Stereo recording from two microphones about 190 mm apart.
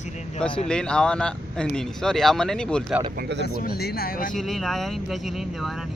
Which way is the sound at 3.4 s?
55° left (ahead or behind).